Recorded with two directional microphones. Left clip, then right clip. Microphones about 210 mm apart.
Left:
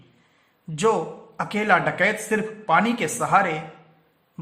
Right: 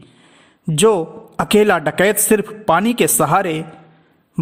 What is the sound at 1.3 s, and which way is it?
Speech, 50° right (ahead or behind).